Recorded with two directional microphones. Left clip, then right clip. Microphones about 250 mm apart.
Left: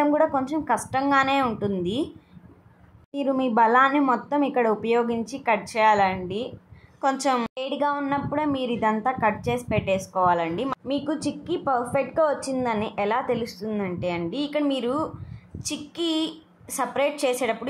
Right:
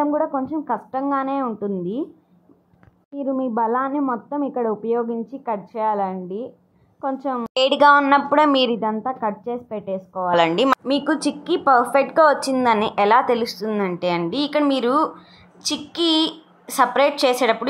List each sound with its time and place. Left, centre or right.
0.0 s a woman's voice: centre
3.2 s a woman's voice: centre